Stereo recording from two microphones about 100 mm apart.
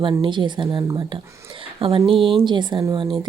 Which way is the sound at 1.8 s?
65° right (ahead or behind).